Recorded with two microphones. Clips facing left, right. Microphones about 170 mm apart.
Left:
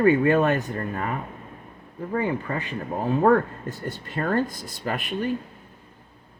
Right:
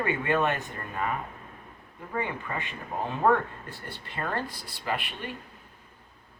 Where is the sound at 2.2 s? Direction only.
40° left (ahead or behind).